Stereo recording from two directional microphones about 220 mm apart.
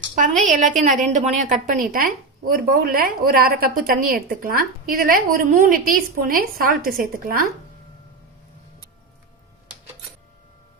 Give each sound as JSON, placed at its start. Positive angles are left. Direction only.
{"t": 0.2, "sound": "a woman's voice", "side_deg": -35}